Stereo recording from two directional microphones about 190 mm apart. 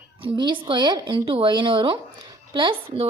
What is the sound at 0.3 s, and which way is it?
Speech, 25° right (ahead or behind).